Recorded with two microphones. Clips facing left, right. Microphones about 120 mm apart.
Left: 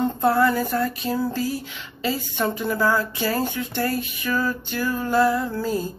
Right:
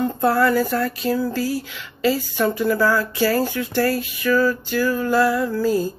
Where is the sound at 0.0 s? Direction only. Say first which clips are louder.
Right 1 dB; 20° left (ahead or behind).